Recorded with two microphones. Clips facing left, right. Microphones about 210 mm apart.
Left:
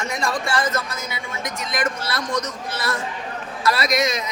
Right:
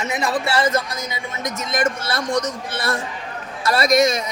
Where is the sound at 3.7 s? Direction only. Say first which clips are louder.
Right 10 dB; 50° right (ahead or behind).